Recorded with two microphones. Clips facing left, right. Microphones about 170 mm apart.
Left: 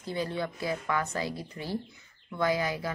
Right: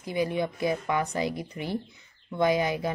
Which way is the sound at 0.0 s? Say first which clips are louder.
Right 4 dB; 15° right (ahead or behind).